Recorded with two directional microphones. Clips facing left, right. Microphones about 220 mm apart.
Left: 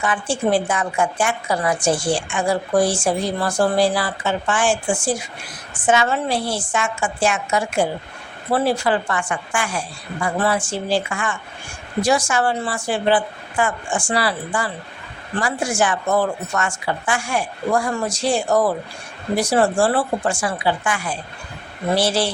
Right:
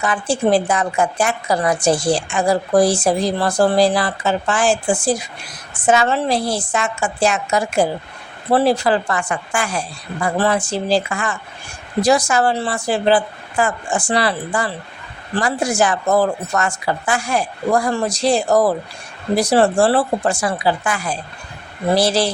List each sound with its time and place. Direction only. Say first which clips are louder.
0.0 s a woman's voice: right 3 dB; 40° right (ahead or behind)